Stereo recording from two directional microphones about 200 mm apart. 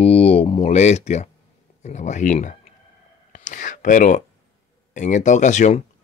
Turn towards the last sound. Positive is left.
turn(degrees=35)  # may be behind; listen again after turning